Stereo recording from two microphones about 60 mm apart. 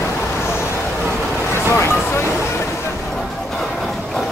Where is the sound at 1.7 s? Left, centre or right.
Left.